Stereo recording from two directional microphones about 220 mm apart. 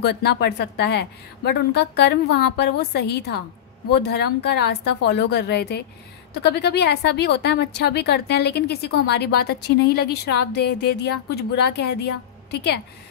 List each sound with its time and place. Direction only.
0.0 s a woman's voice: 50° left (ahead or behind)